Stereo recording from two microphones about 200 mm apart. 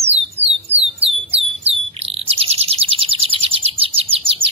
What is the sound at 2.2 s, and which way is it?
Bird, 30° right (ahead or behind).